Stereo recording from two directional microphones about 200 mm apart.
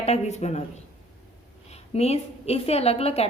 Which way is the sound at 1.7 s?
30° left (ahead or behind).